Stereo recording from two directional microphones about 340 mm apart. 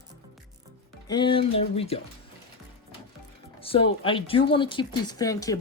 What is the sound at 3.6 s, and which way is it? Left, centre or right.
Music, centre.